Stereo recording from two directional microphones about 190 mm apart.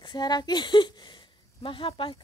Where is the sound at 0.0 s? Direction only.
20° left (ahead or behind).